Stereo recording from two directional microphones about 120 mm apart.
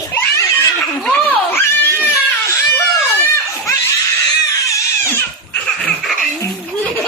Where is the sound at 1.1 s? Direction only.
15° left (ahead or behind).